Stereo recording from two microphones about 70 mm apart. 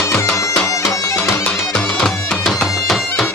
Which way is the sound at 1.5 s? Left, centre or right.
Centre.